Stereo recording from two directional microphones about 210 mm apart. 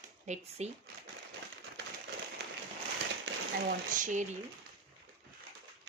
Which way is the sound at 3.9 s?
35° right (ahead or behind).